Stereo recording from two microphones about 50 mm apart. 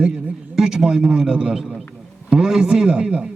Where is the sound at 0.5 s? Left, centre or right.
Centre.